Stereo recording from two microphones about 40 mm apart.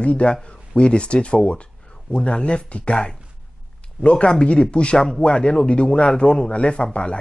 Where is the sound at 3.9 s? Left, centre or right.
Left.